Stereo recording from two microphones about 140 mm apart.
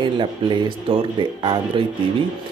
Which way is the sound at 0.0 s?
35° right (ahead or behind).